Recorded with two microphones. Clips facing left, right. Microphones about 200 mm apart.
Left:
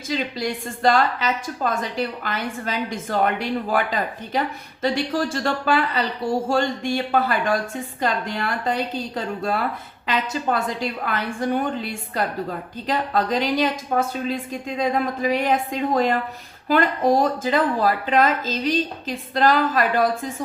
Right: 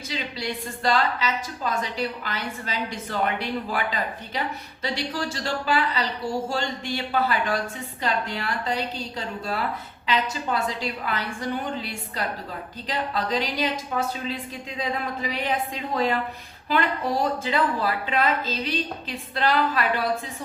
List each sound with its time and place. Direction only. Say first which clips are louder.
0.1 s speech: left 6 dB; 50° left (ahead or behind)